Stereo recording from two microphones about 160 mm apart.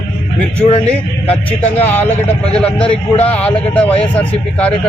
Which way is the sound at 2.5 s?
5° left (ahead or behind).